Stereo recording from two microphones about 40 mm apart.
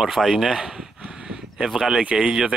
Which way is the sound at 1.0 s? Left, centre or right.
Right.